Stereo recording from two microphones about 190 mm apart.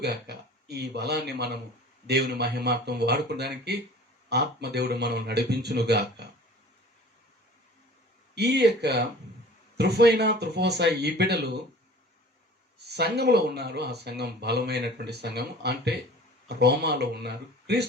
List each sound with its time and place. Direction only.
0.0 s speech: 60° right (ahead or behind)
8.4 s speech: 60° right (ahead or behind)
12.9 s speech: 60° right (ahead or behind)